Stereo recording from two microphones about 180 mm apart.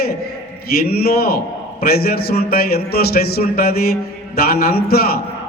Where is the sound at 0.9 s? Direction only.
60° left (ahead or behind).